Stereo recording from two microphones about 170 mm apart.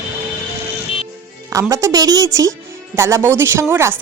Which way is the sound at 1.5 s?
15° right (ahead or behind).